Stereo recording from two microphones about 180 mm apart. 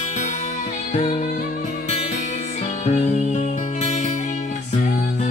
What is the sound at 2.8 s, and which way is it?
Music, 40° left (ahead or behind).